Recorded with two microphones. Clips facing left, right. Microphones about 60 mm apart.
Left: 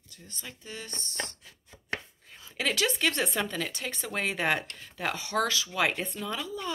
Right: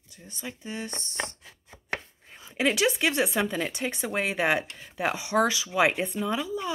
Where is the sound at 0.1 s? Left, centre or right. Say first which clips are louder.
Right 6 dB; centre.